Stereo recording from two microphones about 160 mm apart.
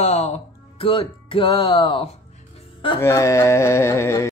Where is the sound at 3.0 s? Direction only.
15° left (ahead or behind).